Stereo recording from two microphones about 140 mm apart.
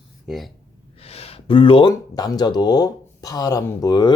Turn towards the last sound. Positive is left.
turn(degrees=25)  # may be behind; listen again after turning